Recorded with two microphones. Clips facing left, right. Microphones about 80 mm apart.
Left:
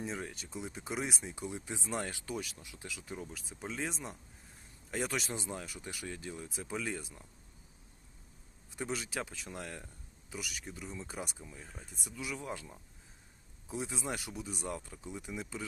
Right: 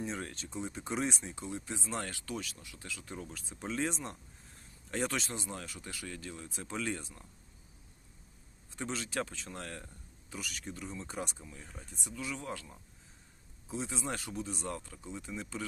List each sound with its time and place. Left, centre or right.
0.0 s speech: centre
3.3 s speech: centre
5.2 s speech: left
8.7 s speech: centre
14.0 s speech: centre